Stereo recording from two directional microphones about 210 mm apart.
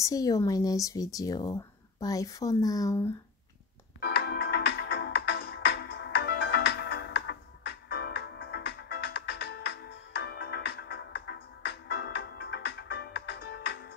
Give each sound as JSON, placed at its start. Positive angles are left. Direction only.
{"t": 0.0, "sound": "speech", "side_deg": 15}
{"t": 4.0, "sound": "music", "side_deg": 50}